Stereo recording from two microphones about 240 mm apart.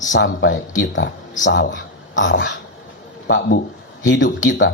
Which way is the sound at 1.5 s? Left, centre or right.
Left.